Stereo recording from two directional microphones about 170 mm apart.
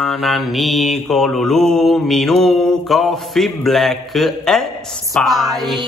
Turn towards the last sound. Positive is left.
turn(degrees=0)  # may be behind; listen again after turning